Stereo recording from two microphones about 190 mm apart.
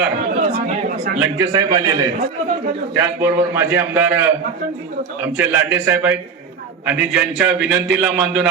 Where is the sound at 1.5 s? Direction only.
20° right (ahead or behind).